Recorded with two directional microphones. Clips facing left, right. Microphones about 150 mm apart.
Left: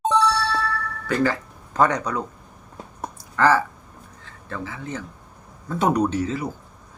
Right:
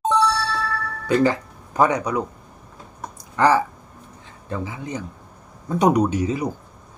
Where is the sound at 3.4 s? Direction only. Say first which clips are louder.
Right 1 dB; 15° right (ahead or behind).